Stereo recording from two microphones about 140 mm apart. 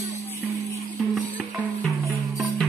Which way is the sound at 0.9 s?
Centre (ahead or behind).